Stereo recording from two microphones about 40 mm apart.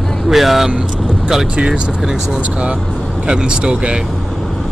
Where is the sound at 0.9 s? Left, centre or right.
Centre.